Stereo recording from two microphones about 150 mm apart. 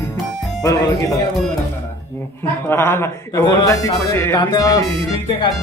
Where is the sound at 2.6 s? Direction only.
15° left (ahead or behind).